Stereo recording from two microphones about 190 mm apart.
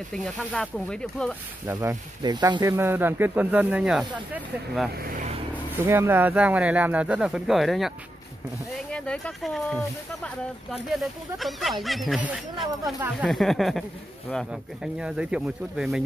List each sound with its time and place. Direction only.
0.1 s speech: 5° left (ahead or behind)
1.7 s speech: 15° right (ahead or behind)
4.9 s speech: 50° right (ahead or behind)
5.7 s speech: 10° right (ahead or behind)
8.9 s speech: 5° left (ahead or behind)